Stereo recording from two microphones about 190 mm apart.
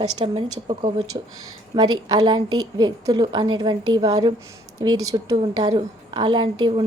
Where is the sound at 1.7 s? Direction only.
20° right (ahead or behind).